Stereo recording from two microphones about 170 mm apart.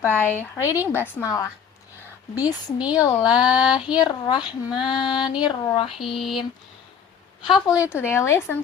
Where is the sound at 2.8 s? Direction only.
20° left (ahead or behind).